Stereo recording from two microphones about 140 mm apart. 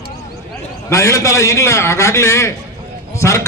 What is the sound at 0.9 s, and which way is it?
A man's voice, 20° left (ahead or behind).